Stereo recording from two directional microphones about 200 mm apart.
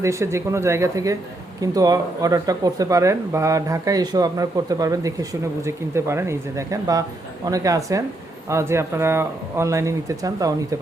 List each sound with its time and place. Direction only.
0.0 s speech: 15° right (ahead or behind)